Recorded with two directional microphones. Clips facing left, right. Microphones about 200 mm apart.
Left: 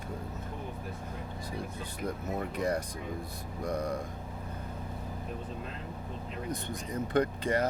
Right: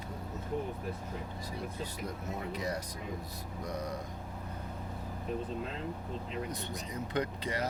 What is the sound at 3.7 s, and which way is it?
Vehicle, 55° left (ahead or behind).